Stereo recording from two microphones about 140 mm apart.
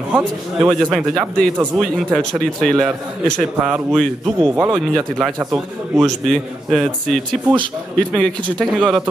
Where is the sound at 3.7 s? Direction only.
15° right (ahead or behind).